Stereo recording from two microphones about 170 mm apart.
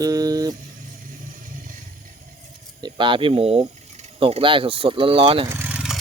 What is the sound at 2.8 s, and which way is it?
Speech, 30° right (ahead or behind).